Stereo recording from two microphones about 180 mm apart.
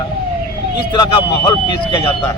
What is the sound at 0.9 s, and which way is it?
Speech, 25° left (ahead or behind).